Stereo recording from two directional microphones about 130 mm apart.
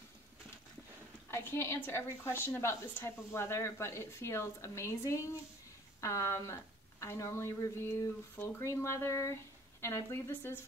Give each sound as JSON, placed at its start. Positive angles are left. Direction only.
{"t": 1.3, "sound": "a woman's voice", "side_deg": 20}